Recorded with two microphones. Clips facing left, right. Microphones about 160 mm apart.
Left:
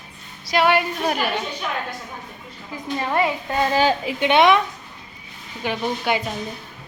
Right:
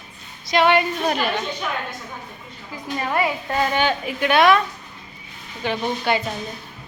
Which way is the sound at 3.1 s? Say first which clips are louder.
Left 1 dB; 25° left (ahead or behind).